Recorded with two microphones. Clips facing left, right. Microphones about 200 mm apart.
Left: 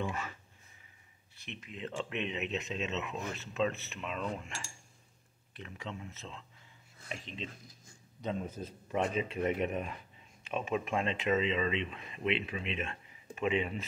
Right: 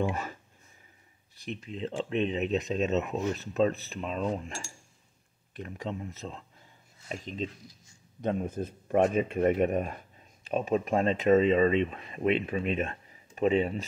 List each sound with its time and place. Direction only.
0.1 s speech: 40° right (ahead or behind)
1.4 s speech: 35° right (ahead or behind)
7.6 s a sound: 55° left (ahead or behind)
8.2 s speech: 55° right (ahead or behind); by 13.8 s 40° right (ahead or behind)